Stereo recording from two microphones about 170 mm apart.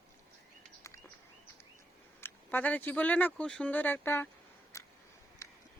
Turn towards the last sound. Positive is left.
turn(degrees=20)  # may be behind; listen again after turning